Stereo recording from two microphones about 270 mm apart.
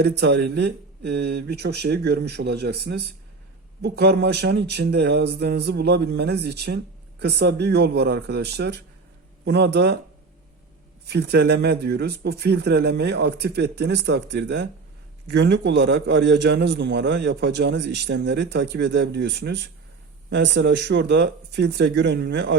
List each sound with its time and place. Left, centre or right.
0.0 s a man's voice: right
11.1 s a man's voice: right